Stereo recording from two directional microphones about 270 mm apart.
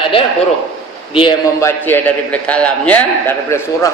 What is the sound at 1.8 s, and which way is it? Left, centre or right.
A man's voice, centre.